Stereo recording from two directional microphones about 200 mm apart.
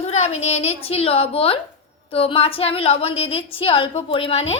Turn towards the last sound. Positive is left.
turn(degrees=30)  # may be behind; listen again after turning